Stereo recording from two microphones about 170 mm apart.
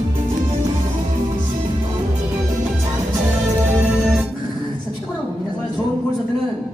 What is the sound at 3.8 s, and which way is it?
Music, 5° right (ahead or behind).